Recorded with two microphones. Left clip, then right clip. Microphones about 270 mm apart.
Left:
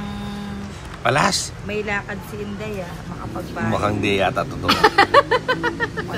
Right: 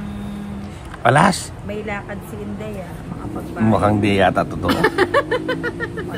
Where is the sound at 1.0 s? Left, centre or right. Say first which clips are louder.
Right 4 dB; right.